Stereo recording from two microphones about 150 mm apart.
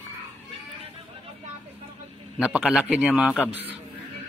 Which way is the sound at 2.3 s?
5° right (ahead or behind).